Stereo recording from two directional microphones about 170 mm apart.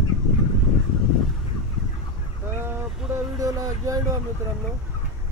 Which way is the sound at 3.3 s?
20° right (ahead or behind).